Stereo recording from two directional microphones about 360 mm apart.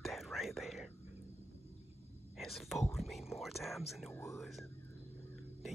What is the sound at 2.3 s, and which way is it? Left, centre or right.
Speech, centre.